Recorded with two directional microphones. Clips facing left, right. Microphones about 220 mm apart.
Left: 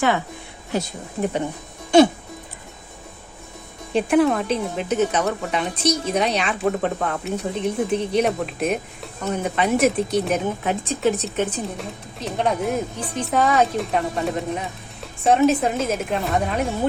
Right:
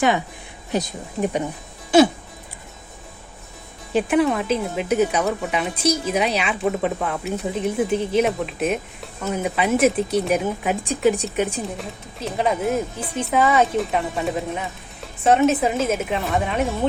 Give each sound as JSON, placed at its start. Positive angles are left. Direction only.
{"t": 0.7, "sound": "speech", "side_deg": -15}
{"t": 3.9, "sound": "speech", "side_deg": 0}
{"t": 11.6, "sound": "speech", "side_deg": 0}